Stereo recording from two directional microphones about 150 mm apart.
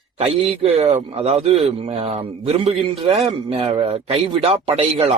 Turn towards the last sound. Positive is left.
turn(degrees=-45)  # may be behind; listen again after turning